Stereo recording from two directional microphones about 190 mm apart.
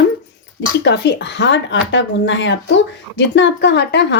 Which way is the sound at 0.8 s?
65° left (ahead or behind).